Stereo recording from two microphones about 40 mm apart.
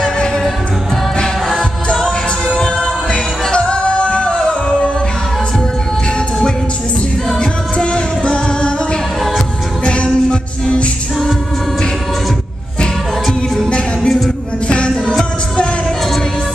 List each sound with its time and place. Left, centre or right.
2.0 s music: centre
7.3 s music: left
9.8 s music: left
13.7 s music: left